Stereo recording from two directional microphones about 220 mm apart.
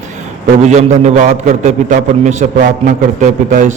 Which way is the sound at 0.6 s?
30° right (ahead or behind).